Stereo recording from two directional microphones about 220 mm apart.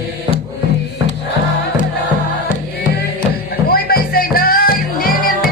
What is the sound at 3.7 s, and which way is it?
Music, 45° left (ahead or behind).